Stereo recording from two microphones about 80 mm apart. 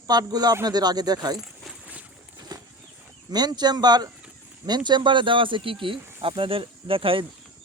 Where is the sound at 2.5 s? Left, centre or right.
Right.